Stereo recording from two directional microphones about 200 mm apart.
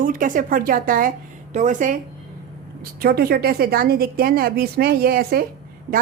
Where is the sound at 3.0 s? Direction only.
50° right (ahead or behind).